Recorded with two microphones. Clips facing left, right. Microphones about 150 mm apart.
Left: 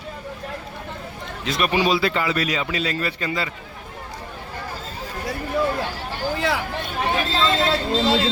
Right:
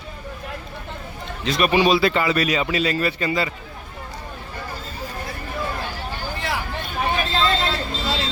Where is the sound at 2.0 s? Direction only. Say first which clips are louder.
Right 3 dB; 65° right (ahead or behind).